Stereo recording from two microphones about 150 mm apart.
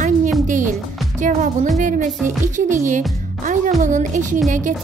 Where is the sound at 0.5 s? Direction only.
60° right (ahead or behind).